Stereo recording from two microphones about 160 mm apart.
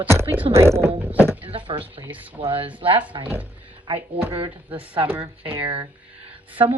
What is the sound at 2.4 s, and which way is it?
Speech, 35° right (ahead or behind).